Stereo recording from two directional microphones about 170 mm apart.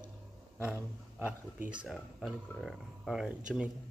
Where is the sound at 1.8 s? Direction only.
Centre (ahead or behind).